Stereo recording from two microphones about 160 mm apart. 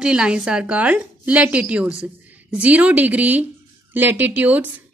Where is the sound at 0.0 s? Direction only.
5° right (ahead or behind).